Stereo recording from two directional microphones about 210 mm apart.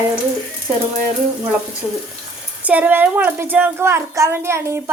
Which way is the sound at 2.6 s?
5° right (ahead or behind).